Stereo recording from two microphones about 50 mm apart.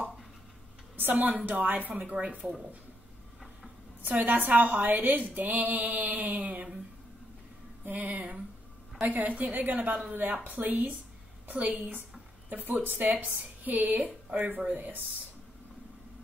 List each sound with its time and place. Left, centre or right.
0.9 s a woman's voice: right
4.0 s a woman's voice: right
7.8 s a woman's voice: right